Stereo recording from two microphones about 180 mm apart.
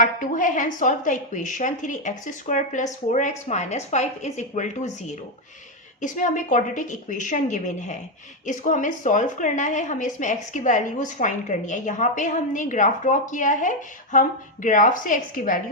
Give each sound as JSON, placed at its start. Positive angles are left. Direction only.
{"t": 0.0, "sound": "a woman's voice", "side_deg": 45}